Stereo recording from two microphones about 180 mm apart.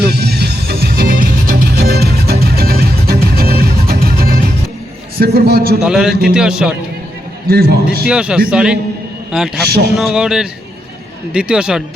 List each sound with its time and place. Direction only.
0.1 s music: 65° right (ahead or behind)
5.2 s a man's voice: 60° right (ahead or behind)
5.8 s speech: centre (ahead or behind)
7.4 s a man's voice: 60° right (ahead or behind)
8.0 s speech: 5° right (ahead or behind)